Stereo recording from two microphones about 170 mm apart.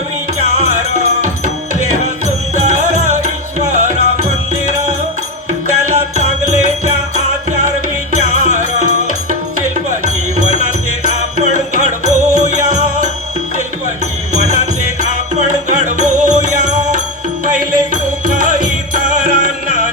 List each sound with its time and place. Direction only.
0.3 s music: 45° right (ahead or behind)
5.5 s music: 45° right (ahead or behind)
8.1 s music: 45° right (ahead or behind)
14.3 s music: 45° right (ahead or behind)